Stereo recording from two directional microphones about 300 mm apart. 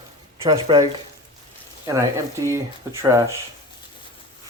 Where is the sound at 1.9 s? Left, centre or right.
Centre.